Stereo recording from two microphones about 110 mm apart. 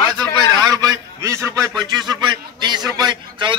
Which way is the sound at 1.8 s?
40° right (ahead or behind).